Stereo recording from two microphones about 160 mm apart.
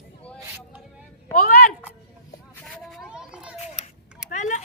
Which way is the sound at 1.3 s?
60° left (ahead or behind).